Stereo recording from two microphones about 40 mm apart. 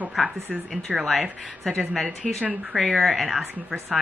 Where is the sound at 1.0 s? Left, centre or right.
Centre.